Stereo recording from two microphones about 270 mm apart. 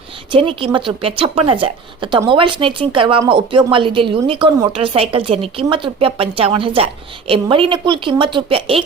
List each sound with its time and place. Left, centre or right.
0.3 s speech: centre